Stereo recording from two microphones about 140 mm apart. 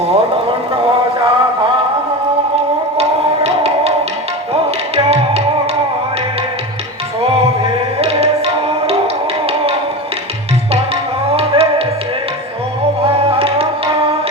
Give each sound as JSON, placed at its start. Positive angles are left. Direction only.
{"t": 1.2, "sound": "music", "side_deg": -40}
{"t": 3.0, "sound": "music", "side_deg": -45}
{"t": 5.0, "sound": "music", "side_deg": -45}
{"t": 7.6, "sound": "music", "side_deg": -45}
{"t": 11.3, "sound": "music", "side_deg": -45}
{"t": 13.1, "sound": "music", "side_deg": -40}